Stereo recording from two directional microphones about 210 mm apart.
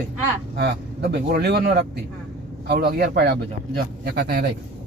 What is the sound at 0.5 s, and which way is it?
Speech, 50° right (ahead or behind).